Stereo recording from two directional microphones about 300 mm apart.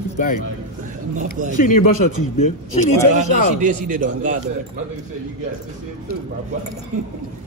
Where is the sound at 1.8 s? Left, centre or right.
Left.